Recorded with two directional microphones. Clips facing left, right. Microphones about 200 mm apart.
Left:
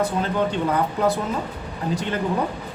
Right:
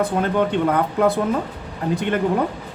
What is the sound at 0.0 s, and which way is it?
A man's voice, 55° right (ahead or behind).